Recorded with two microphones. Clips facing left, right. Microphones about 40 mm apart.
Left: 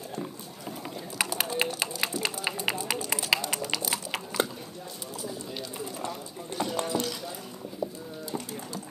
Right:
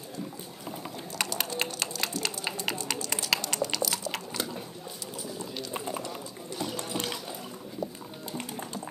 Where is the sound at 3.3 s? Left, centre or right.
Centre.